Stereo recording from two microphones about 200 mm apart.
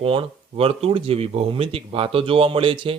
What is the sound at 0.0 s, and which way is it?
Speech, 25° right (ahead or behind).